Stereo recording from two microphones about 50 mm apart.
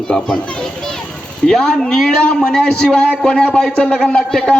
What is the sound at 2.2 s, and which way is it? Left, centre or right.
Speech, centre.